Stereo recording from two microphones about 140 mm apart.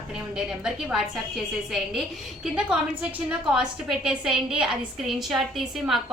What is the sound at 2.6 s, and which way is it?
A woman's voice, 5° right (ahead or behind).